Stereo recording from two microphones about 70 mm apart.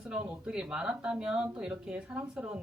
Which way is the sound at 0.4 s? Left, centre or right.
Centre.